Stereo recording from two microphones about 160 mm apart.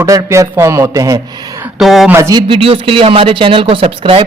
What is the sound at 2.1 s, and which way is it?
A man's voice, 20° right (ahead or behind).